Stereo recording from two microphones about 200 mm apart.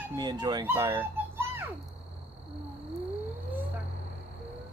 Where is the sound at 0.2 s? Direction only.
20° right (ahead or behind).